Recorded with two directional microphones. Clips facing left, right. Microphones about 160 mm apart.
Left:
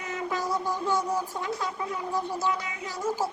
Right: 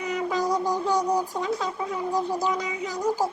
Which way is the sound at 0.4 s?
40° right (ahead or behind).